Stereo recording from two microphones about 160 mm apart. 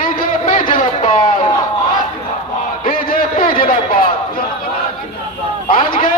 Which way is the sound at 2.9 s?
65° left (ahead or behind).